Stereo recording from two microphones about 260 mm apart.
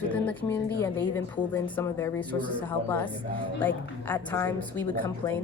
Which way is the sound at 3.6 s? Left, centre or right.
Centre.